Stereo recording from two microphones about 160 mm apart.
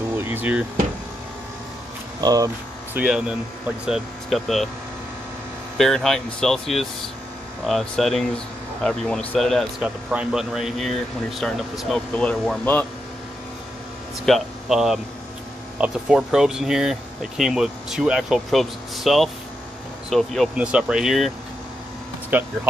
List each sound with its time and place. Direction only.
0.2 s a sound: 10° right (ahead or behind)
2.1 s speech: 25° right (ahead or behind)
2.9 s speech: 5° right (ahead or behind)
5.8 s speech: 5° left (ahead or behind)
14.2 s speech: centre (ahead or behind)
22.3 s speech: 10° right (ahead or behind)